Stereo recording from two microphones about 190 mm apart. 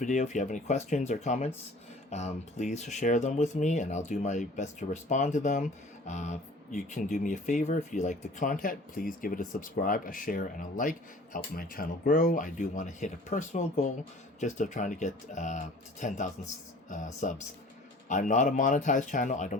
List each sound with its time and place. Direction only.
0.0 s speech: 40° left (ahead or behind)